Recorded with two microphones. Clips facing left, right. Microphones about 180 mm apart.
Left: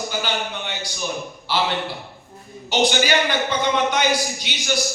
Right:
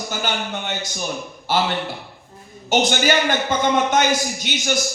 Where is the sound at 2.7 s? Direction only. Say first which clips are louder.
Right 1 dB; 45° right (ahead or behind).